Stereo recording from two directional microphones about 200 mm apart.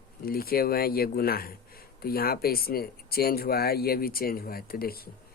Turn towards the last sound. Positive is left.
turn(degrees=50)  # may be behind; listen again after turning